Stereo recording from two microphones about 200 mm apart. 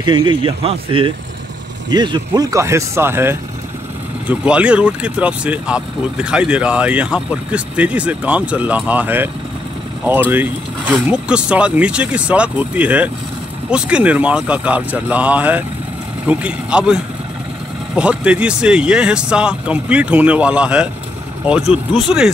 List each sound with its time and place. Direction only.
0.0 s speech: 20° right (ahead or behind)
10.3 s speech: 10° right (ahead or behind)